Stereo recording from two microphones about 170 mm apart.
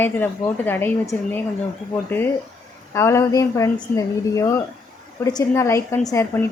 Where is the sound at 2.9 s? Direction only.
15° left (ahead or behind).